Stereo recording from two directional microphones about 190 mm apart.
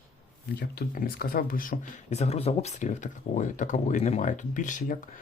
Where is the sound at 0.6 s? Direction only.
50° left (ahead or behind).